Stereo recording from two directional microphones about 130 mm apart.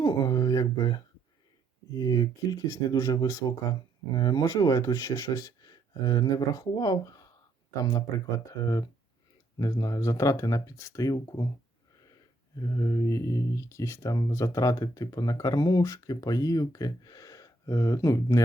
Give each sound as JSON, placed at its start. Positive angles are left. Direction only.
{"t": 0.0, "sound": "a sound", "side_deg": 30}
{"t": 1.9, "sound": "speech", "side_deg": 30}
{"t": 12.5, "sound": "speech", "side_deg": 25}